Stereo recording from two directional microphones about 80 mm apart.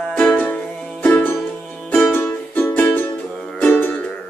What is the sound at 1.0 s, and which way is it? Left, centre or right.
Music, left.